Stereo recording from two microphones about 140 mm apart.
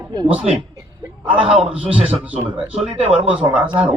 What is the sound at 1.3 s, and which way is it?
Speech, 10° right (ahead or behind).